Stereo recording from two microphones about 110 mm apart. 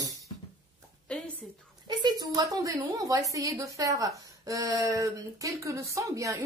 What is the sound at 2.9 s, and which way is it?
A woman's voice, 30° right (ahead or behind).